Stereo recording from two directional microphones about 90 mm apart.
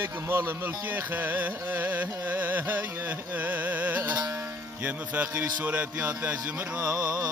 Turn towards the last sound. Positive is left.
turn(degrees=-35)  # may be behind; listen again after turning